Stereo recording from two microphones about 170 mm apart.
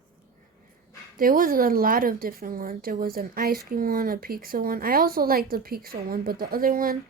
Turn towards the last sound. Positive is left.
turn(degrees=-60)  # may be behind; listen again after turning